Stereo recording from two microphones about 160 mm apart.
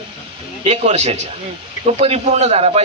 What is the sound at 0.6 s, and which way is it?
A man's voice, 40° right (ahead or behind).